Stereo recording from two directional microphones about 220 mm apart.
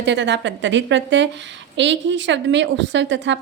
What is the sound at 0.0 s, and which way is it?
A woman's voice, 55° right (ahead or behind).